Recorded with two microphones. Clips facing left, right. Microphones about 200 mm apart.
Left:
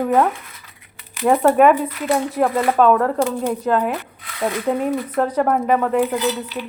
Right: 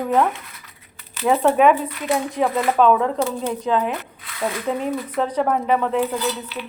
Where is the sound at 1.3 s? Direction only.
10° left (ahead or behind).